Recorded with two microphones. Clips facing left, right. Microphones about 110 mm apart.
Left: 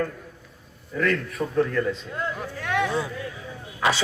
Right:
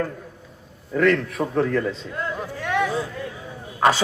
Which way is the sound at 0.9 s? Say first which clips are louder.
Right 5 dB; 90° right.